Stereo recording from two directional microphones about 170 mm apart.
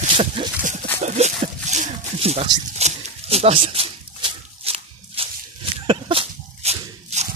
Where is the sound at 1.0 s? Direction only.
40° right (ahead or behind).